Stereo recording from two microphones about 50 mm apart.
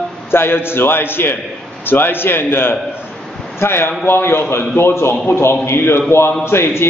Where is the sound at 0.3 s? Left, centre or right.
Left.